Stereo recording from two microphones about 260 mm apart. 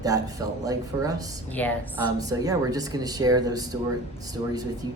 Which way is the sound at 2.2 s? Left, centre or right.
Centre.